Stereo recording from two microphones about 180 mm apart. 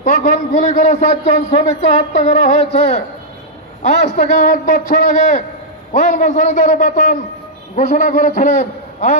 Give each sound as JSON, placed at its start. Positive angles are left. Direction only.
{"t": 0.0, "sound": "a man's voice", "side_deg": 50}